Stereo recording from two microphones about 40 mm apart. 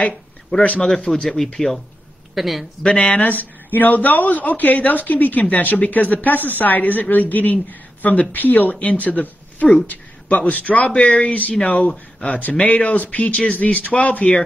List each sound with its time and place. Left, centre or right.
0.7 s speech: centre
2.3 s speech: centre
3.0 s speech: left